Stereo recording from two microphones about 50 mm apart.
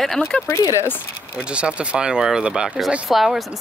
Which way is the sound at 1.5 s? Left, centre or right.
Right.